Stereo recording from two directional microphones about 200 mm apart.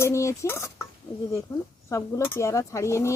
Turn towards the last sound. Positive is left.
turn(degrees=15)  # may be behind; listen again after turning